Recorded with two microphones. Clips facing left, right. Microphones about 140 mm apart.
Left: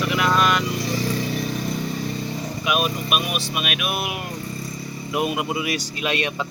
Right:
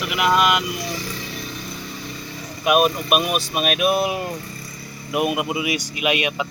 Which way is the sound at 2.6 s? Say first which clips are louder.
Right 7 dB; 50° right (ahead or behind).